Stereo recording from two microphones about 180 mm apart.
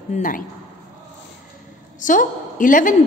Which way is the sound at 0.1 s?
45° left (ahead or behind).